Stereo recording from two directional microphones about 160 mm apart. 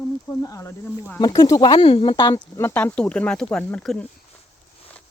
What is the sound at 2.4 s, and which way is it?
Speech, 10° left (ahead or behind).